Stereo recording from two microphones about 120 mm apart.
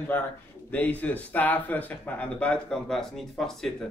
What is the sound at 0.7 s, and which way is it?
Speech, 15° left (ahead or behind).